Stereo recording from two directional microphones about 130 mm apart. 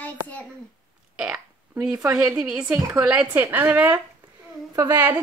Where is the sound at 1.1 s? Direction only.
10° right (ahead or behind).